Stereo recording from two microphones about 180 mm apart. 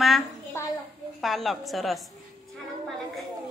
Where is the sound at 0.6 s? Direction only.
15° left (ahead or behind).